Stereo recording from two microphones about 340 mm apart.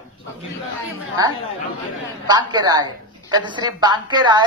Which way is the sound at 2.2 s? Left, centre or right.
Centre.